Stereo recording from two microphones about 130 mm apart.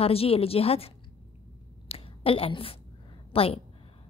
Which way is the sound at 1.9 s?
45° left (ahead or behind).